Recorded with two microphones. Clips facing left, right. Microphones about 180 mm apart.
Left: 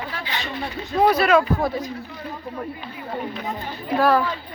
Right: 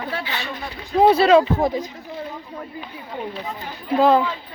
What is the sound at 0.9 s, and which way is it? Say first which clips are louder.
Speech: right 4 dB; 25° right (ahead or behind).